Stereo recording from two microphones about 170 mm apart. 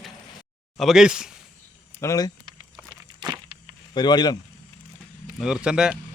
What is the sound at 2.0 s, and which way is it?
Speech, 20° left (ahead or behind).